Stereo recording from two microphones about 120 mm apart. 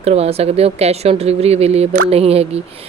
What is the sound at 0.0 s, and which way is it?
Speech, 60° right (ahead or behind).